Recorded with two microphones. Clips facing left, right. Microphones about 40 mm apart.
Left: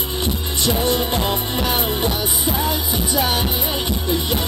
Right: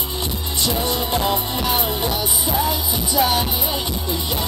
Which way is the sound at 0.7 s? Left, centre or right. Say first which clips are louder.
Left 2 dB; left.